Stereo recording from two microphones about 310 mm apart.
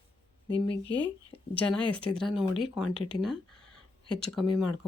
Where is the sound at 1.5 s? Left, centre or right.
Centre.